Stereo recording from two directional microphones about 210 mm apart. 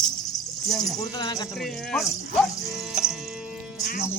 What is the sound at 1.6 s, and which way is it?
Speech, centre (ahead or behind).